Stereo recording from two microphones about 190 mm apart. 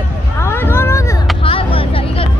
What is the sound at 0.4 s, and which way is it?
Vehicle, 10° left (ahead or behind).